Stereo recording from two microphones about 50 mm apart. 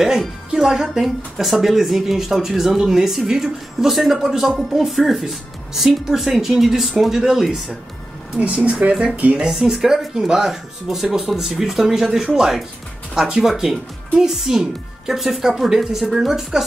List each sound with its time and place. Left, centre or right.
0.5 s a woman's voice: centre
8.6 s speech: right
9.5 s speech: centre